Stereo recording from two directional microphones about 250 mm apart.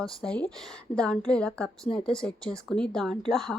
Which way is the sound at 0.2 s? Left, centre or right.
Centre.